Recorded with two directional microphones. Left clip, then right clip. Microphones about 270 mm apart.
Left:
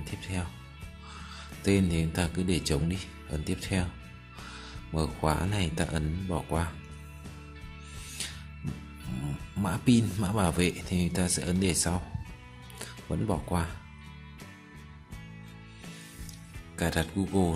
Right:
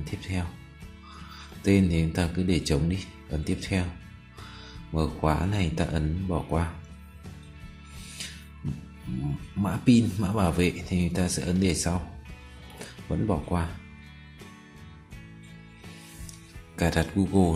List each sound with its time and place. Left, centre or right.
0.0 s speech: centre
1.6 s speech: centre
8.1 s music: centre
9.6 s speech: centre
16.7 s speech: centre